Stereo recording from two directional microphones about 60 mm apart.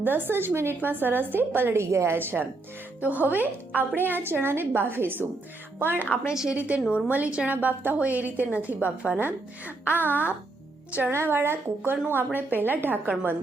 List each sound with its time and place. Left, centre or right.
0.0 s a woman's voice: right
2.1 s a woman's voice: right
6.2 s a woman's voice: centre
6.6 s a woman's voice: right
10.0 s a child's voice: left
11.1 s a woman's voice: right